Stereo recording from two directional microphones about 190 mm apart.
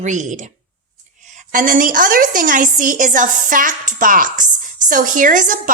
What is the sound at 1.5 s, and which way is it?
A woman's voice, 45° right (ahead or behind).